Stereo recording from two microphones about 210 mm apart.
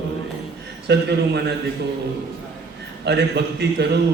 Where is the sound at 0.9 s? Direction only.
55° right (ahead or behind).